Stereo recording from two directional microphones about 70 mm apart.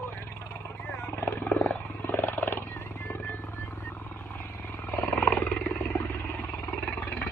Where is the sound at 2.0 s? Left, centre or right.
Left.